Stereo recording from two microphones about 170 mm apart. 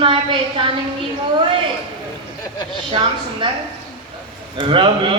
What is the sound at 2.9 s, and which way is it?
Speech, 30° right (ahead or behind).